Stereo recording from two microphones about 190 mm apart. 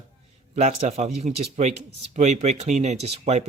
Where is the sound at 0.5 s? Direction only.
40° right (ahead or behind).